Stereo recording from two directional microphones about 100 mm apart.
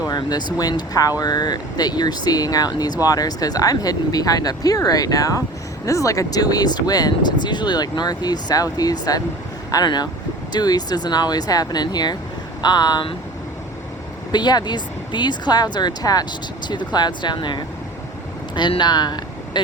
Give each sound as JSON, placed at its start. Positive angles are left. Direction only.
{"t": 0.1, "sound": "speech", "side_deg": 45}
{"t": 14.3, "sound": "speech", "side_deg": 45}
{"t": 18.8, "sound": "speech", "side_deg": 45}